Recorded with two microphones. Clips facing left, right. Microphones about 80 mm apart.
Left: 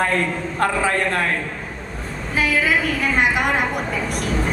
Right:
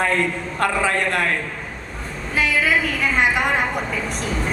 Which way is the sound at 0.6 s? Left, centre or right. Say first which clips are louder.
Even; left.